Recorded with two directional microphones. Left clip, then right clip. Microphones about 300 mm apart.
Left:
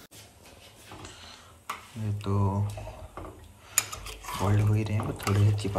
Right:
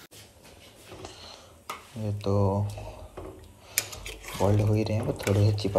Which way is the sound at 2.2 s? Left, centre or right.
Left.